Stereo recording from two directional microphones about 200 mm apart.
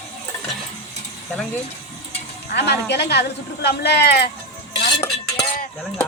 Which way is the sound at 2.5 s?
55° left (ahead or behind).